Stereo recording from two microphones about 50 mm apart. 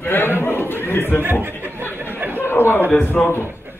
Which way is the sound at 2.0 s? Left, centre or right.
Right.